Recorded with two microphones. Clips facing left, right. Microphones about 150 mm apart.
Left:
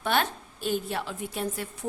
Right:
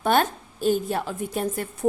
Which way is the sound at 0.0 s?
45° right (ahead or behind).